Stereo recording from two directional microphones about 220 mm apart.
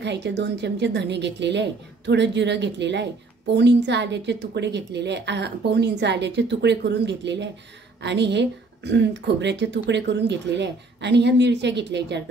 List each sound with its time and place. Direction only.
0.0 s a woman's voice: 50° right (ahead or behind)